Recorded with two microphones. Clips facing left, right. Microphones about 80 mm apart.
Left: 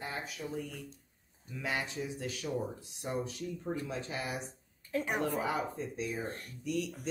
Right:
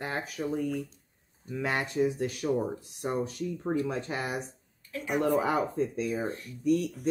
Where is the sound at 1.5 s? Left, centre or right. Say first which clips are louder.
Right 6 dB; right.